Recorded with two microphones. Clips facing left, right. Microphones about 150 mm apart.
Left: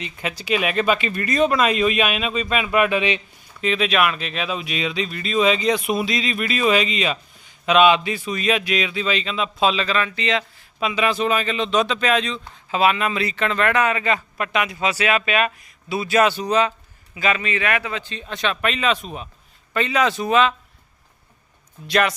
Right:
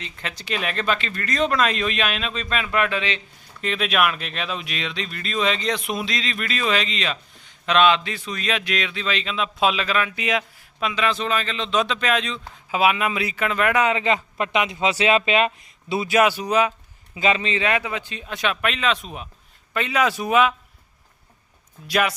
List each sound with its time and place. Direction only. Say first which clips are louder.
0.0 s speech: left 5 dB; 10° left (ahead or behind)
3.6 s speech: left 2 dB; centre (ahead or behind)
10.8 s speech: left 3 dB; 5° left (ahead or behind); by 16.0 s 25° right (ahead or behind)
16.0 s speech: left 1 dB; 10° right (ahead or behind)
17.2 s speech: right 1 dB; 25° right (ahead or behind)
21.8 s speech: left 2 dB; 5° right (ahead or behind)